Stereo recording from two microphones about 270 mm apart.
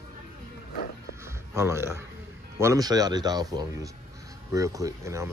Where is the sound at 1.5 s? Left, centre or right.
Centre.